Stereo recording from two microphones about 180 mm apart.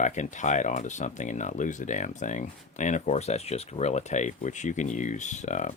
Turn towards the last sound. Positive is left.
turn(degrees=40)  # may be behind; listen again after turning